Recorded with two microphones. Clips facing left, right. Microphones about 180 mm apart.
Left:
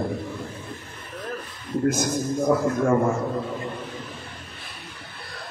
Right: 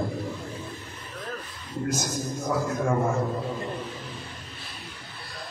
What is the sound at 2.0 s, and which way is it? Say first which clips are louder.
Speech: left 7 dB; 55° left (ahead or behind).